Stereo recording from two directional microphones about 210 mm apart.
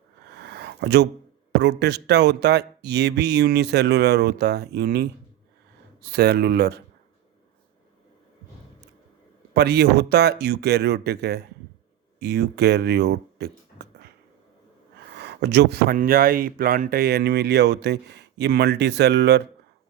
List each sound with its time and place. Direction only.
0.3 s a sound: 50° right (ahead or behind)
1.5 s speech: 55° right (ahead or behind)
9.6 s speech: 50° right (ahead or behind)
15.1 s speech: 50° right (ahead or behind)